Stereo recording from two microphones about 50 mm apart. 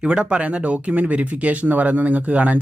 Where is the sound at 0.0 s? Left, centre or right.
Centre.